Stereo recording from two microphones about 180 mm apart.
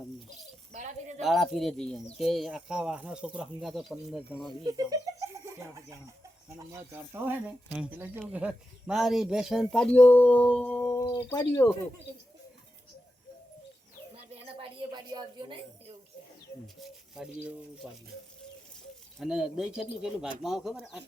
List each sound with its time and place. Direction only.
0.7 s speech: 40° right (ahead or behind)
1.2 s speech: centre (ahead or behind)
4.6 s speech: 20° right (ahead or behind)
6.7 s speech: 15° right (ahead or behind); by 11.7 s 15° left (ahead or behind)
14.2 s a sound: 30° right (ahead or behind)
17.2 s speech: 5° right (ahead or behind)
19.2 s speech: 5° right (ahead or behind)